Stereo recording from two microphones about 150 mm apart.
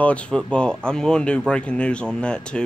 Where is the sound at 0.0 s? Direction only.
10° left (ahead or behind).